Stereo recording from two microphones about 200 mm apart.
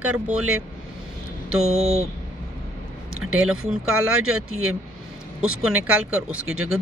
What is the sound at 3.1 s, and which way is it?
A woman's voice, 90° right.